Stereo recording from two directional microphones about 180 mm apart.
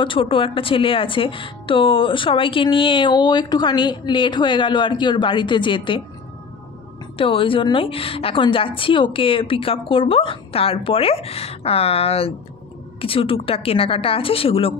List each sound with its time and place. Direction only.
0.0 s speech: 30° left (ahead or behind)
7.2 s a woman's voice: 30° left (ahead or behind)